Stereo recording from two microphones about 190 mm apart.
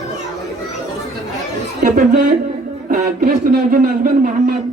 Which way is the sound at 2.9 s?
50° right (ahead or behind).